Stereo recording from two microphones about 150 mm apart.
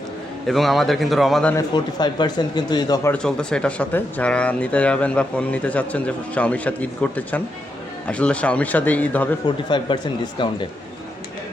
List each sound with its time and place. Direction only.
0.4 s a man's voice: centre (ahead or behind)
1.5 s speech: 30° left (ahead or behind)
3.1 s speech: 5° left (ahead or behind)
9.6 s speech: 30° left (ahead or behind)